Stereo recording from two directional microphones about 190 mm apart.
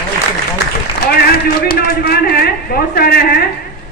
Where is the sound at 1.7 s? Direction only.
55° left (ahead or behind).